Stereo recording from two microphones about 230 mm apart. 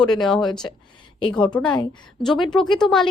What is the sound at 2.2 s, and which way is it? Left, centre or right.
Speech, centre.